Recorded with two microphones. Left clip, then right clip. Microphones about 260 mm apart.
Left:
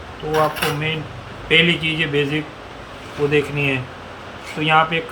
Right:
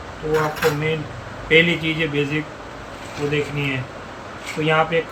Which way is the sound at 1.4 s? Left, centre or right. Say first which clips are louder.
Even; centre.